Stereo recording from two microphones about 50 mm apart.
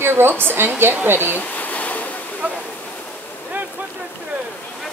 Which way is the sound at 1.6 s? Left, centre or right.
Left.